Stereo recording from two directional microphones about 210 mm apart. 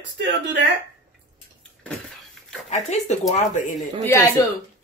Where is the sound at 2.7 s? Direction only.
30° left (ahead or behind).